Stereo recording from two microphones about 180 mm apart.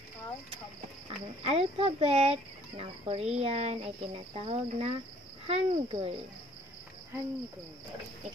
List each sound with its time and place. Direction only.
1.0 s speech: 35° right (ahead or behind)